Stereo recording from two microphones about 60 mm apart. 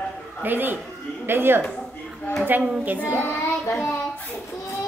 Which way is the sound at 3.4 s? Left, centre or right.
Left.